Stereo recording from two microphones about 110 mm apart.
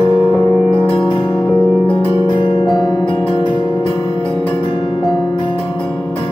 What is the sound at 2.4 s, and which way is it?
Music, 45° left (ahead or behind).